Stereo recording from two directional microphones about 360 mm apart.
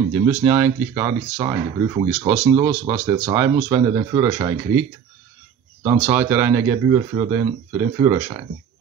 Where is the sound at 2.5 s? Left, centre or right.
Centre.